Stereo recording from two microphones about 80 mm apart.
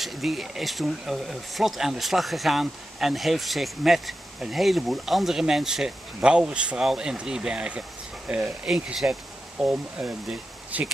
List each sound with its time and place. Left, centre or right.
0.0 s speech: centre